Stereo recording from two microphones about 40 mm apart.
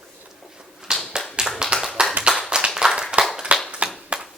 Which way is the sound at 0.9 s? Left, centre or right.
Centre.